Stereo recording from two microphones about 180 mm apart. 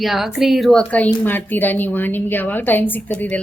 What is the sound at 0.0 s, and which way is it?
A woman's voice, centre (ahead or behind).